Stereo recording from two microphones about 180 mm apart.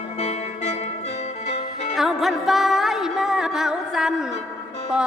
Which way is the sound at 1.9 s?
Centre (ahead or behind).